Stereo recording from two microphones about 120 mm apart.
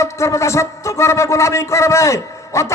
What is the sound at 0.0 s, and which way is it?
A man's voice, 25° left (ahead or behind).